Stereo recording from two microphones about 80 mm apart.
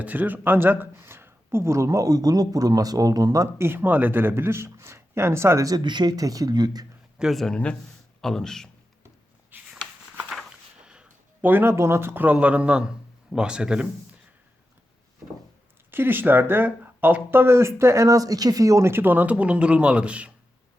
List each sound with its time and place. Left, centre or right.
0.0 s speech: right
3.6 s speech: right
5.8 s speech: right
7.2 s speech: centre
9.5 s a sound: right
10.8 s a sound: centre
11.4 s speech: right
15.9 s speech: right